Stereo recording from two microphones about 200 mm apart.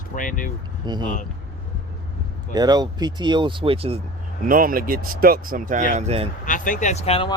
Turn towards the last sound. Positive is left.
turn(degrees=30)  # may be behind; listen again after turning